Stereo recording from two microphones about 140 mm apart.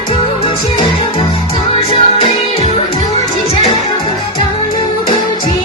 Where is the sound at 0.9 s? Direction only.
40° left (ahead or behind).